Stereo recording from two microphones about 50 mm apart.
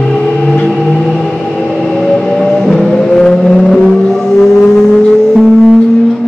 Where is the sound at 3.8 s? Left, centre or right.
Centre.